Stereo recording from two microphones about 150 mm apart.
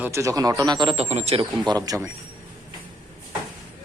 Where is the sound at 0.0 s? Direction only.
20° right (ahead or behind).